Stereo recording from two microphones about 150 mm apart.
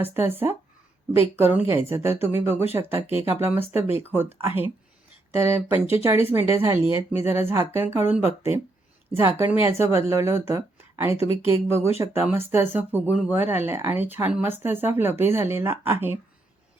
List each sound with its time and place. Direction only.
0.0 s speech: 15° right (ahead or behind)